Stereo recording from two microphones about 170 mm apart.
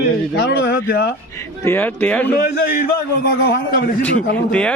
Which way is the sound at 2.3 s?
60° left (ahead or behind).